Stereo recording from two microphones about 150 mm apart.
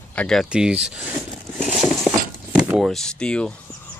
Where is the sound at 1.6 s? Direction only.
Centre (ahead or behind).